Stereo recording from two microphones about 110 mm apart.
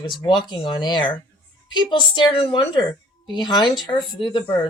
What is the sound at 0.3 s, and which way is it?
Speech, 40° left (ahead or behind).